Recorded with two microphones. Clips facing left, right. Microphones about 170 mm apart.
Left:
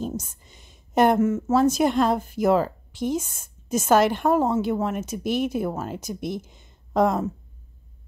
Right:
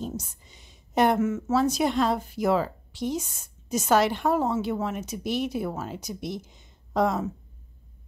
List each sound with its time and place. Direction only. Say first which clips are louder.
0.0 s a woman's voice: left 4 dB; 50° left (ahead or behind)